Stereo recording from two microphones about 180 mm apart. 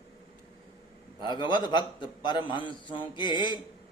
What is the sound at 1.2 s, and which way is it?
A man's voice, 25° left (ahead or behind).